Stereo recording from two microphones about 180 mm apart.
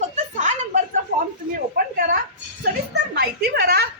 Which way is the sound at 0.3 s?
45° right (ahead or behind).